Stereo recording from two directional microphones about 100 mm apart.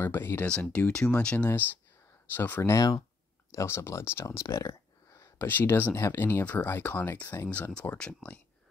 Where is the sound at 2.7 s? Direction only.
35° left (ahead or behind).